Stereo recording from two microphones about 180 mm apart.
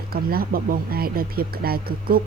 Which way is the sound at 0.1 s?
55° right (ahead or behind).